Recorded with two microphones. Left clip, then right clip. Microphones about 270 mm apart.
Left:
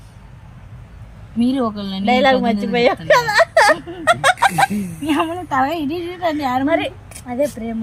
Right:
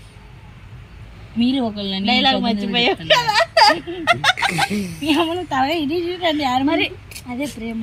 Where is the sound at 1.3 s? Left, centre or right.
Centre.